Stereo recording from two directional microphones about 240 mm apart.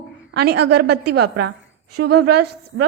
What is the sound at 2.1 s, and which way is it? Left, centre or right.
Speech, right.